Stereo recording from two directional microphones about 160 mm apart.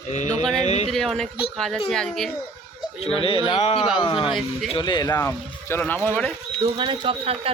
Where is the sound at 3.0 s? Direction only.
35° left (ahead or behind).